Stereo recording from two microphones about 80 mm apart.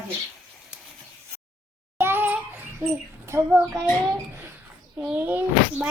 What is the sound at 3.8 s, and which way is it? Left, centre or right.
Speech, right.